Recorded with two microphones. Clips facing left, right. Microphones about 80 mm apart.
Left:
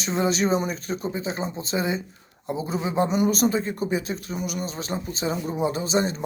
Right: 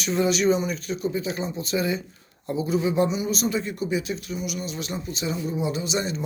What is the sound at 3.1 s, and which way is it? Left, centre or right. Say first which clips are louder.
Speech: left 4 dB; left.